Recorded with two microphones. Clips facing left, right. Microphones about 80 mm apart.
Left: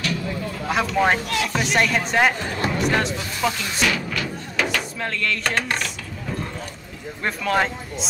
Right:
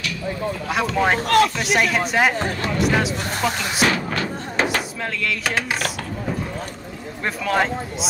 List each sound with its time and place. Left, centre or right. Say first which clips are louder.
0.9 s speech: even; centre
1.2 s speech: right 9 dB; right
1.6 s speech: right 1 dB; centre
3.8 s music: right 3 dB; right
5.2 s speech: even; centre
7.2 s speech: right 1 dB; centre